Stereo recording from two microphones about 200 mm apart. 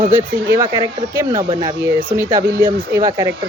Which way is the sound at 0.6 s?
15° right (ahead or behind).